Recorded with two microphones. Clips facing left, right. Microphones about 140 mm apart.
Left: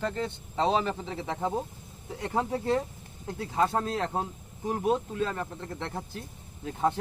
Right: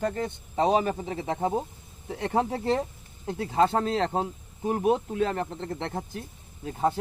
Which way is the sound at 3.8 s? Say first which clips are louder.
Right 4 dB; 70° right (ahead or behind).